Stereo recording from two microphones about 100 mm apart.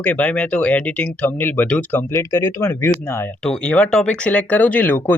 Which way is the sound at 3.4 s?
10° left (ahead or behind).